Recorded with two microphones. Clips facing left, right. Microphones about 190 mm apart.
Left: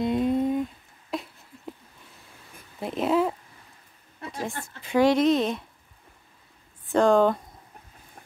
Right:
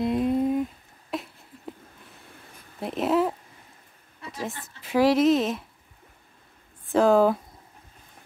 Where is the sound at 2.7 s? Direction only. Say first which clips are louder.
Even; centre (ahead or behind).